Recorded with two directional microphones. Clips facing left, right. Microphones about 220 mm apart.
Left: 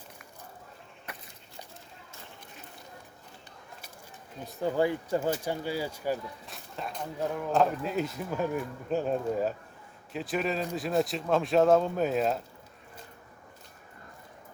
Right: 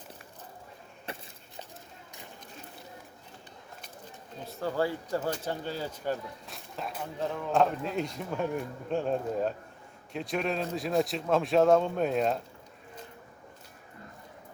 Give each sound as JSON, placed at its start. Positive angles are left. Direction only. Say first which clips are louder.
{"t": 1.1, "sound": "walk", "louder": "right 5 dB", "side_deg": -30}
{"t": 4.4, "sound": "speech", "louder": "left 3 dB", "side_deg": 15}
{"t": 6.4, "sound": "speech", "louder": "even", "side_deg": 0}